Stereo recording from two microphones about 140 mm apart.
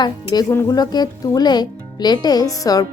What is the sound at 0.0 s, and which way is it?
Speech, 30° left (ahead or behind).